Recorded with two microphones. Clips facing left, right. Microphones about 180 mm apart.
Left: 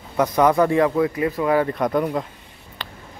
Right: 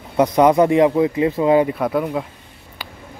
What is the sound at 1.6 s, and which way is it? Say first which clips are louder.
Speech: right 1 dB; 5° right (ahead or behind).